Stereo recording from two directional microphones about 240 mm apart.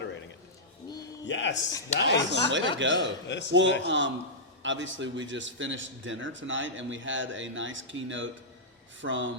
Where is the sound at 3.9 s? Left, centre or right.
Right.